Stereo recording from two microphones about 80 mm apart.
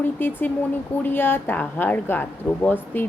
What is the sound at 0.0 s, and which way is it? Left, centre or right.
Speech, left.